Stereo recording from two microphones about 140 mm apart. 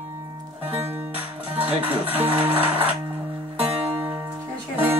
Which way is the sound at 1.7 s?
10° right (ahead or behind).